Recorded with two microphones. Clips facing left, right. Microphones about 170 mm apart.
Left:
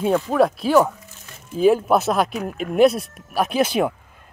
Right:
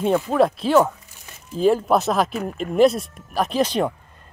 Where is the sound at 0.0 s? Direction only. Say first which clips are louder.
Even; centre (ahead or behind).